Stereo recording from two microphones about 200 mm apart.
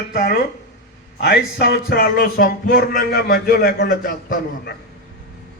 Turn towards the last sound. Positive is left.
turn(degrees=45)  # may be behind; listen again after turning